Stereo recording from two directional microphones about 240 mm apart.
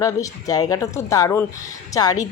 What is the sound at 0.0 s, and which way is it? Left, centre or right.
Speech, centre.